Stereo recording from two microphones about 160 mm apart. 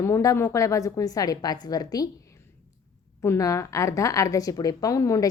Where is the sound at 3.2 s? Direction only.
20° left (ahead or behind).